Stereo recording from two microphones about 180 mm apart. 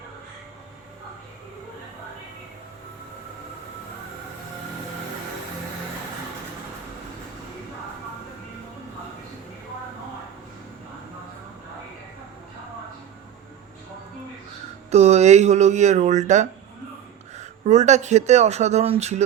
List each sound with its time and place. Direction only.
14.8 s speech: 40° right (ahead or behind)